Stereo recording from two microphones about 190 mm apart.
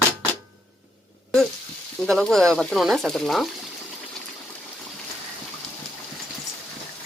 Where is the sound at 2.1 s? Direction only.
5° left (ahead or behind).